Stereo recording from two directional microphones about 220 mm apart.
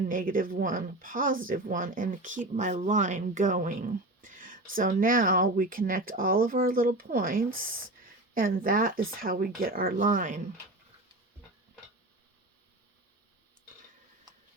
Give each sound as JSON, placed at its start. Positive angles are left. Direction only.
{"t": 0.1, "sound": "speech", "side_deg": -40}